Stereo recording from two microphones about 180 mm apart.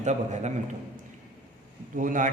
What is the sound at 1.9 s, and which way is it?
Speech, 45° right (ahead or behind).